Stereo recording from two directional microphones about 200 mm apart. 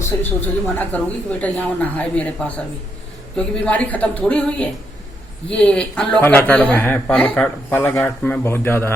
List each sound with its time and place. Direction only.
0.2 s speech: 10° left (ahead or behind)
3.3 s speech: 5° left (ahead or behind)